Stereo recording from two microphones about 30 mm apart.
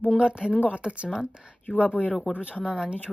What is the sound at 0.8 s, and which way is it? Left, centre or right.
Speech, right.